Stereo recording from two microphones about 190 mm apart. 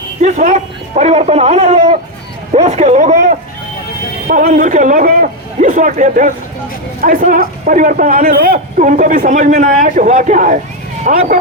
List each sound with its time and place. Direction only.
0.2 s a man's voice: 40° right (ahead or behind)